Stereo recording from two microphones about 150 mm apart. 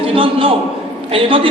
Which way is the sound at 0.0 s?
35° right (ahead or behind).